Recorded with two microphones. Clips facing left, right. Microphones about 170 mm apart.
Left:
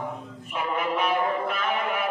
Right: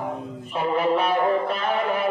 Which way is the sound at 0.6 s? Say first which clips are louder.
Right 5 dB; 35° right (ahead or behind).